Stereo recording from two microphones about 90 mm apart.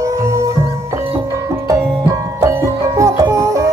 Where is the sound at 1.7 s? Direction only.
30° right (ahead or behind).